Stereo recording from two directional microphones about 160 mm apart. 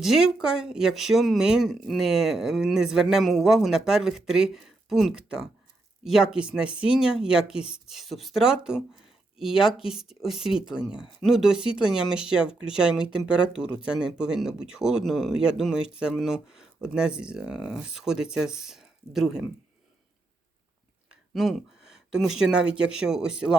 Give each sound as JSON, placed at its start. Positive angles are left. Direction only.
{"t": 0.0, "sound": "speech", "side_deg": -5}
{"t": 21.1, "sound": "speech", "side_deg": 0}